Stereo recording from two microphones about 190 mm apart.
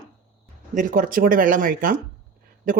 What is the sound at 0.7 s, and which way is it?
Speech, 45° right (ahead or behind).